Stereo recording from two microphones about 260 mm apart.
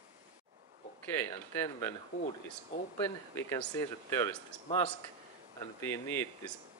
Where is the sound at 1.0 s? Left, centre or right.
Centre.